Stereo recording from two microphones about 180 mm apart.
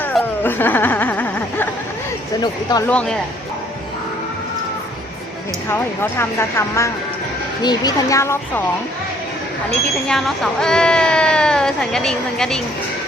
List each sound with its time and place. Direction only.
0.0 s a sound: 10° left (ahead or behind)
2.4 s speech: 20° left (ahead or behind)
2.9 s speech: 5° left (ahead or behind)
5.6 s speech: 15° left (ahead or behind)
7.6 s speech: 20° left (ahead or behind)
10.1 s speech: centre (ahead or behind)